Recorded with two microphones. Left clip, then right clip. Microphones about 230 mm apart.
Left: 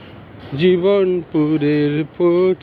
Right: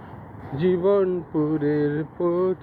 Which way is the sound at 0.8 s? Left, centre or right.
Left.